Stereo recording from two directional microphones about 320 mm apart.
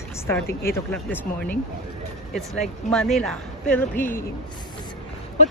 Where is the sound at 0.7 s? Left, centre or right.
Centre.